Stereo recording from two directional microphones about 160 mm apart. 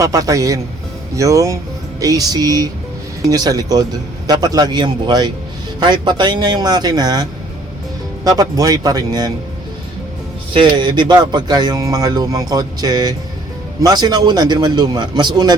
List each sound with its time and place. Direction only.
0.0 s speech: 20° right (ahead or behind)
10.5 s speech: 30° right (ahead or behind)